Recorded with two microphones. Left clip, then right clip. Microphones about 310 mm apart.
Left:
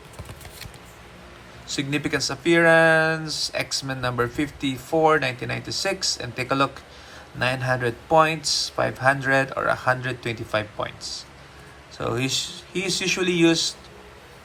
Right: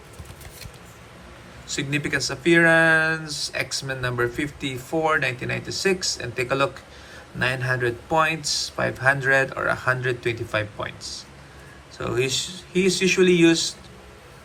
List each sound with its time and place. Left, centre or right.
1.6 s speech: centre